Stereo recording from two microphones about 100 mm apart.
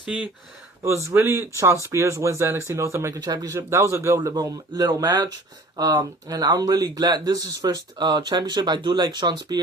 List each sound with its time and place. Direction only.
0.0 s speech: 15° right (ahead or behind)
0.9 s speech: 30° right (ahead or behind)
3.2 s a man's voice: 40° right (ahead or behind)